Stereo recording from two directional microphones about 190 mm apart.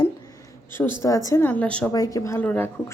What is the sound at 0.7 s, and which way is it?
A woman's voice, 10° left (ahead or behind).